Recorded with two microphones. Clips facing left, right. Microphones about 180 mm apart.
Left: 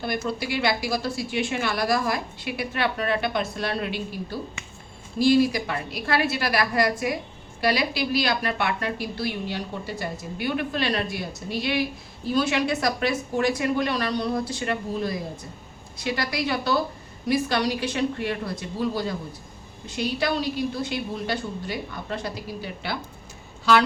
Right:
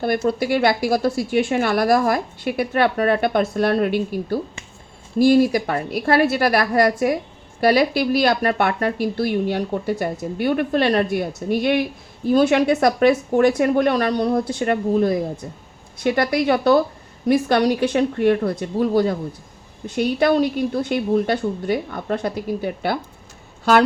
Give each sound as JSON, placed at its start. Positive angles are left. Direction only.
{"t": 0.0, "sound": "a woman's voice", "side_deg": -55}